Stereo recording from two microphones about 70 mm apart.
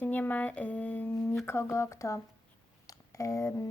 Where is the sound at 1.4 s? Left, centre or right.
Left.